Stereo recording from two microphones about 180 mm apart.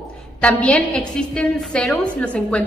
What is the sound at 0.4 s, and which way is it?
A woman's voice, 5° left (ahead or behind).